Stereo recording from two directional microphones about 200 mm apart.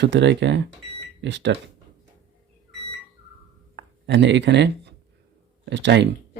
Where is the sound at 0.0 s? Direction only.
65° right (ahead or behind).